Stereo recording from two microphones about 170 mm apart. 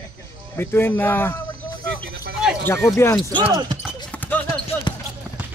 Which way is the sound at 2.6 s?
15° left (ahead or behind).